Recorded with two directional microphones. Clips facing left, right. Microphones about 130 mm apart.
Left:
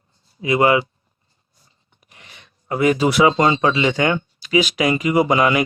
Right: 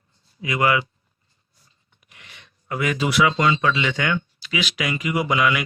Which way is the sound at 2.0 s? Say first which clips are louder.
Left 2 dB; 35° left (ahead or behind).